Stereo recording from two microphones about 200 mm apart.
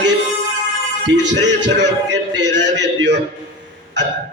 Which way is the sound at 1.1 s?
60° right (ahead or behind).